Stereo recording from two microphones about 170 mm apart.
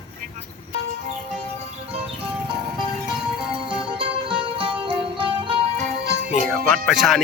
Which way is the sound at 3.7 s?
30° right (ahead or behind).